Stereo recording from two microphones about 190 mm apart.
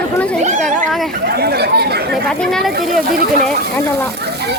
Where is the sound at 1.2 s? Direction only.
55° right (ahead or behind).